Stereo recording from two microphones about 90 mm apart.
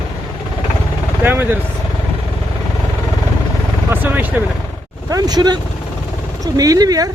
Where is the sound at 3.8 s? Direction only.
20° right (ahead or behind).